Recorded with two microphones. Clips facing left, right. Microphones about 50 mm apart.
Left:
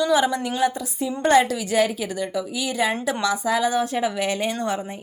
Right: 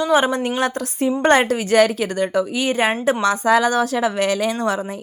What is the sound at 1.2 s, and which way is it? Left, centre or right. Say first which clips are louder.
Speech: right 1 dB; right.